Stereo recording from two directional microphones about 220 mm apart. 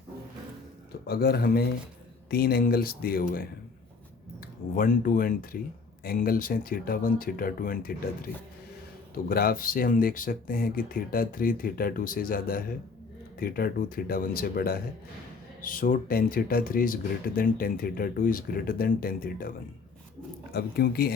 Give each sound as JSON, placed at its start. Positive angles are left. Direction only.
{"t": 1.0, "sound": "speech", "side_deg": 45}
{"t": 4.7, "sound": "speech", "side_deg": 40}
{"t": 9.1, "sound": "speech", "side_deg": 40}